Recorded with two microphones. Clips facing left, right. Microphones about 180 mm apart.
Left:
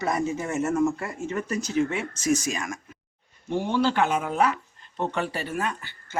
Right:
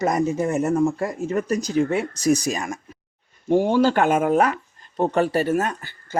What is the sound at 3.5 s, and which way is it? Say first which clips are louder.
Speech: right 7 dB; 45° right (ahead or behind).